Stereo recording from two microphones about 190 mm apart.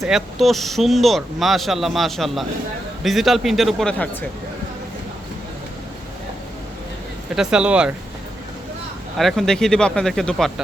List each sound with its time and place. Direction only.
0.0 s speech: centre (ahead or behind)
7.3 s speech: 5° right (ahead or behind)
9.1 s speech: centre (ahead or behind)